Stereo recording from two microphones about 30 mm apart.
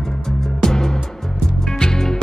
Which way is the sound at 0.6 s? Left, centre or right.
Centre.